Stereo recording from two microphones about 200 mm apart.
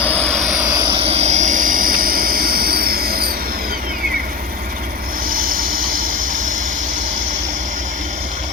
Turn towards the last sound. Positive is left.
turn(degrees=-40)  # may be behind; listen again after turning